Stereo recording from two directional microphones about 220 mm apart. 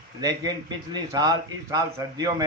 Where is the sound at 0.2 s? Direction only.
15° right (ahead or behind).